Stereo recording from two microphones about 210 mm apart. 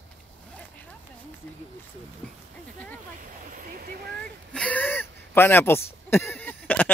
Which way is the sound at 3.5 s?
40° right (ahead or behind).